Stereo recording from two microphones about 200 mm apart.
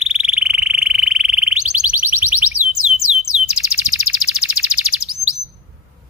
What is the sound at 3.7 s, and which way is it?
Bird, 5° right (ahead or behind).